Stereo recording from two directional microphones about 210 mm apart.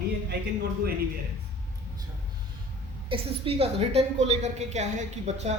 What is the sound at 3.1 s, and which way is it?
Speech, 25° right (ahead or behind).